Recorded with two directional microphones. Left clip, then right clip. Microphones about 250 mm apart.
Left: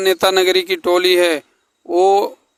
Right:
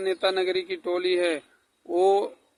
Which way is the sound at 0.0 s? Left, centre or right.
Left.